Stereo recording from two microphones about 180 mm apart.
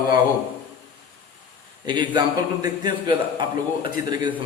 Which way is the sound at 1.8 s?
25° right (ahead or behind).